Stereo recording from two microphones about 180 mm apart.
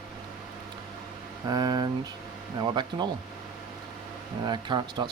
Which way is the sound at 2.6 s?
25° right (ahead or behind).